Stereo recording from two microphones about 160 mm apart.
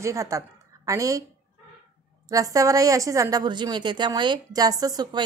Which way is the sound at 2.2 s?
20° right (ahead or behind).